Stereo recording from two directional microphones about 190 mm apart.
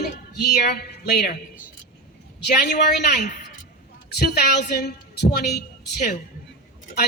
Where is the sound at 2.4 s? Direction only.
55° left (ahead or behind).